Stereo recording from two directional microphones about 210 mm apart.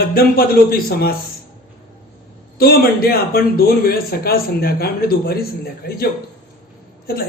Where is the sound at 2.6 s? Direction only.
45° left (ahead or behind).